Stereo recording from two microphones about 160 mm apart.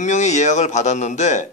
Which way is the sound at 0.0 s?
45° left (ahead or behind).